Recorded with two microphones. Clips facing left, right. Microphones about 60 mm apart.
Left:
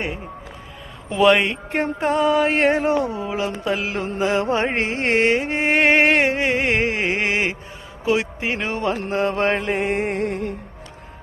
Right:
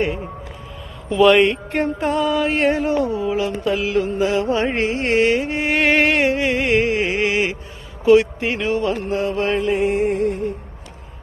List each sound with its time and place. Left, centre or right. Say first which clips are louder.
1.1 s speech: right 2 dB; left
1.7 s mantra: right 1 dB; left
4.2 s music: left 3 dB; left
8.0 s a sound: right 8 dB; centre
8.5 s mantra: right 3 dB; left
9.0 s music: even; left